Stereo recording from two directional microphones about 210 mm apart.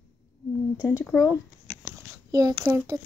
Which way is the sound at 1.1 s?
10° left (ahead or behind).